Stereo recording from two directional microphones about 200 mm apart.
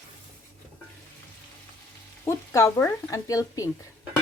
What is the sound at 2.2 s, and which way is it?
Speech, 15° left (ahead or behind).